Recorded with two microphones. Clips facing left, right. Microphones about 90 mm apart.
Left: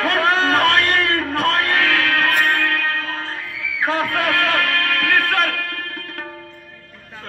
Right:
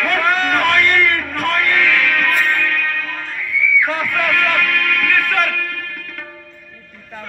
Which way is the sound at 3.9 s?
40° left (ahead or behind).